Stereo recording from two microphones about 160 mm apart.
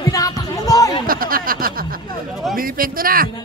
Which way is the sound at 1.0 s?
65° right (ahead or behind).